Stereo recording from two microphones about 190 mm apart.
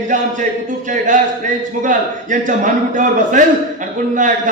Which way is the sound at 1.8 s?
45° right (ahead or behind).